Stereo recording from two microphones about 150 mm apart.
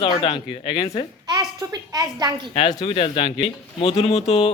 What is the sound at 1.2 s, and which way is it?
A child's voice, 25° right (ahead or behind).